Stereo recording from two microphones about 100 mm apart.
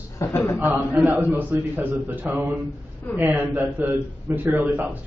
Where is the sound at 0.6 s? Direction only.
15° right (ahead or behind).